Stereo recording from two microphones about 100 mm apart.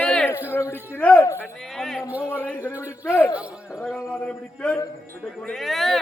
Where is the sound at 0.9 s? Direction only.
15° left (ahead or behind).